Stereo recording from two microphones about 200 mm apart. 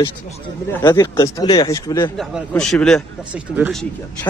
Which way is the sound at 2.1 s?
Centre (ahead or behind).